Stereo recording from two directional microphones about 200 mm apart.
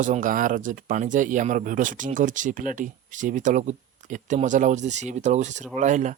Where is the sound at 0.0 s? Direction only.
40° right (ahead or behind).